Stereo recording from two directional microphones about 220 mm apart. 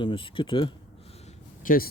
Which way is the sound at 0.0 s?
20° left (ahead or behind).